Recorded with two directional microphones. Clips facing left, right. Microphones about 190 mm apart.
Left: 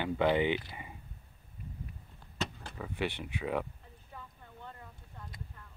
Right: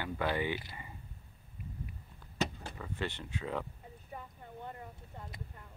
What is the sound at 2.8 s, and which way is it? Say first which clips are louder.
Speech: left 4 dB; 15° left (ahead or behind).